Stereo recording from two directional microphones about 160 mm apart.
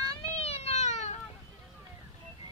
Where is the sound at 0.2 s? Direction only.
40° left (ahead or behind).